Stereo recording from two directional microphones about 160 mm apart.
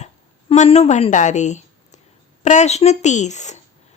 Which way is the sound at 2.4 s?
45° left (ahead or behind).